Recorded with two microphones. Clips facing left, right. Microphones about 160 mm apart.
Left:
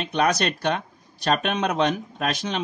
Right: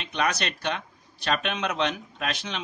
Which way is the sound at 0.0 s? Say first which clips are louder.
Left 6 dB; 45° left (ahead or behind).